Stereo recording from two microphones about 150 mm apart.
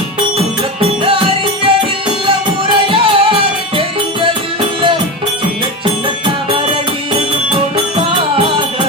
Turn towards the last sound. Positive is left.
turn(degrees=-35)  # may be behind; listen again after turning